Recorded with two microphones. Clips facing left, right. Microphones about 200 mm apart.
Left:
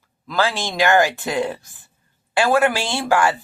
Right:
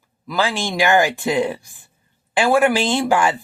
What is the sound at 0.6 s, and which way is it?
Speech, 15° right (ahead or behind).